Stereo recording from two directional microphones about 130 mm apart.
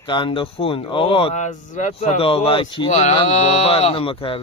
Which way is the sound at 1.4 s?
65° left (ahead or behind).